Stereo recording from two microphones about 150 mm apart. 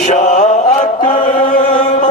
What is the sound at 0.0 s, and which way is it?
Mantra, 50° left (ahead or behind).